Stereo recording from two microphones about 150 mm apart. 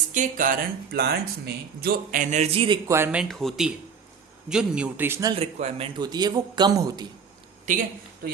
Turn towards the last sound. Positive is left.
turn(degrees=-55)  # may be behind; listen again after turning